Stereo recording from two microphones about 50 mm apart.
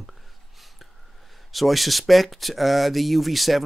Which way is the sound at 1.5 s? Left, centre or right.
Centre.